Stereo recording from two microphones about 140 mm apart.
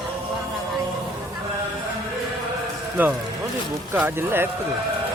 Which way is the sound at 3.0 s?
10° right (ahead or behind).